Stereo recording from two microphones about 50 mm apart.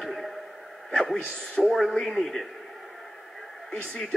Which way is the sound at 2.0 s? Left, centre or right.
Centre.